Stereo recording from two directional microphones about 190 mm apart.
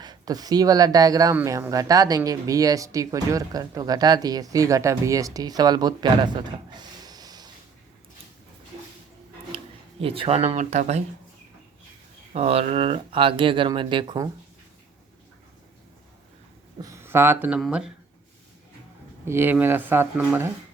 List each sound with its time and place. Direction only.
0.0 s speech: 20° right (ahead or behind)
9.5 s a sound: 30° right (ahead or behind)
10.0 s speech: 30° right (ahead or behind)
12.3 s speech: 35° right (ahead or behind)
16.7 s speech: 15° right (ahead or behind)
19.2 s speech: 10° right (ahead or behind)